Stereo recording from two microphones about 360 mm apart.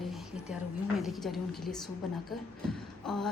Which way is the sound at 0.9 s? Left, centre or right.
Centre.